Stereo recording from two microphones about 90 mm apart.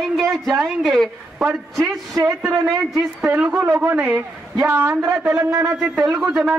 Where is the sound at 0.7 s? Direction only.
Centre (ahead or behind).